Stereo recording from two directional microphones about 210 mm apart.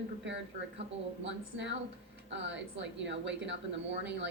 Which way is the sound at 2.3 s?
55° right (ahead or behind).